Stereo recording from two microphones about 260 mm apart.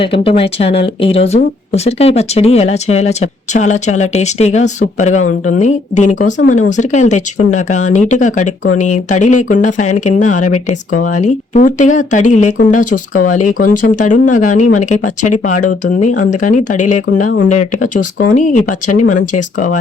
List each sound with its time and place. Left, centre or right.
0.0 s speech: left
18.9 s speech: left
19.2 s speech: left